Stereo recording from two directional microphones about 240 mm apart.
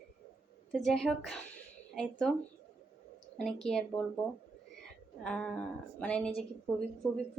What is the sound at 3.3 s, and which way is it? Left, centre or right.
Speech, centre.